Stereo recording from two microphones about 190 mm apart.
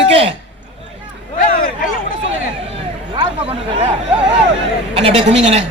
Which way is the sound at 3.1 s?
25° right (ahead or behind).